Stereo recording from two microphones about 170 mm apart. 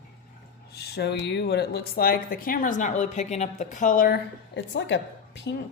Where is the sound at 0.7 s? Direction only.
70° left (ahead or behind); by 4.1 s 55° left (ahead or behind).